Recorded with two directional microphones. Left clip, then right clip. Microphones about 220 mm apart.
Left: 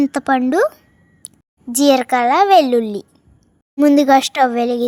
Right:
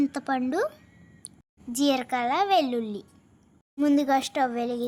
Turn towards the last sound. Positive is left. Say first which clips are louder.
# left 11 dB
turn(degrees=35)  # may be behind; listen again after turning